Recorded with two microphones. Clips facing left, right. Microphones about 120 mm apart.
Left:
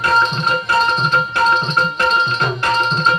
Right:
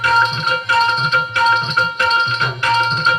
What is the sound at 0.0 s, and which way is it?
Music, 40° left (ahead or behind).